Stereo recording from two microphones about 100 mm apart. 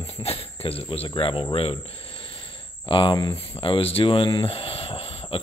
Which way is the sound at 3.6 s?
65° left (ahead or behind).